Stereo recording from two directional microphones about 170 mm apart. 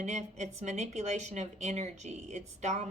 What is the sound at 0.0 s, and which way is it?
A woman's voice, 45° right (ahead or behind).